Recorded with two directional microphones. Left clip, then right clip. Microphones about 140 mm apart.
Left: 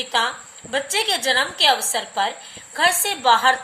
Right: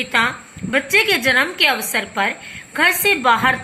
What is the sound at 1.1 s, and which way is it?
Speech, 25° left (ahead or behind).